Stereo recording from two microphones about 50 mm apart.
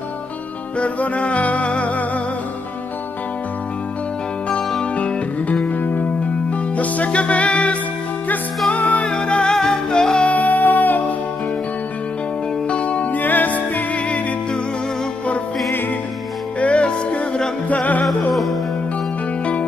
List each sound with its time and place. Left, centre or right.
0.7 s music: left
4.9 s music: left
5.7 s music: left
6.8 s music: left
9.0 s music: centre
10.2 s music: left
12.6 s music: left
16.5 s music: left
18.3 s music: centre